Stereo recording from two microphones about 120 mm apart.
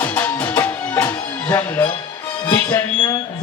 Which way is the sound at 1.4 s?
30° left (ahead or behind).